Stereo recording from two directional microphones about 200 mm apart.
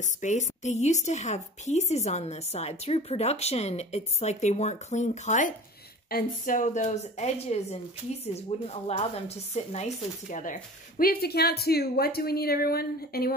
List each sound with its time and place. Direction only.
0.0 s a woman's voice: 35° left (ahead or behind)